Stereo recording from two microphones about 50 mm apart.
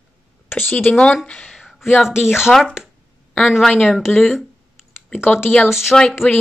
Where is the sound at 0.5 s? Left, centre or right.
Left.